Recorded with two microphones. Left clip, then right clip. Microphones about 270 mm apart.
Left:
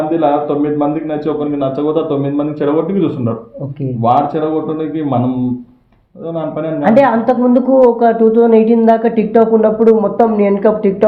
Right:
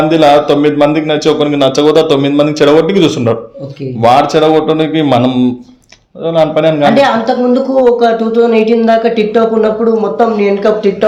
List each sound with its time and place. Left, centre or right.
0.1 s a man's voice: right
6.9 s speech: centre